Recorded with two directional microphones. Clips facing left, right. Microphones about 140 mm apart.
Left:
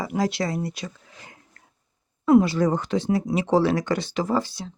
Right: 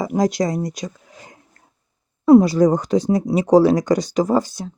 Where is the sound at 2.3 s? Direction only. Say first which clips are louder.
Right 6 dB; 40° right (ahead or behind).